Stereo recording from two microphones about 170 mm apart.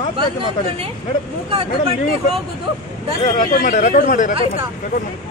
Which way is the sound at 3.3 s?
55° left (ahead or behind).